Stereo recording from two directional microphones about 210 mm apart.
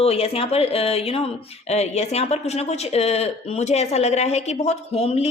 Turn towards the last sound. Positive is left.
turn(degrees=30)  # may be behind; listen again after turning